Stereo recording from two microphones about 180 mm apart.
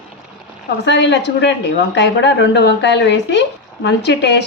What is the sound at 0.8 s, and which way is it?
Speech, 75° left (ahead or behind).